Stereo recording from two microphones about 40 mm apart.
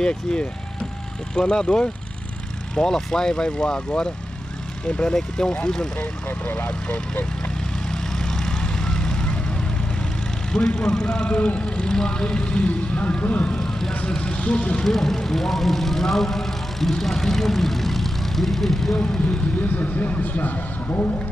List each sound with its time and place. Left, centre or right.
0.0 s speech: left
6.2 s speech: left
7.9 s vehicle: centre
10.5 s speech: centre
13.2 s speech: left
13.6 s vehicle: centre
14.0 s vehicle: left
14.5 s speech: left
14.8 s speech: centre
19.2 s speech: left